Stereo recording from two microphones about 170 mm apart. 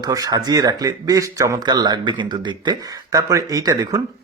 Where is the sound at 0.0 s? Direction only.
20° right (ahead or behind).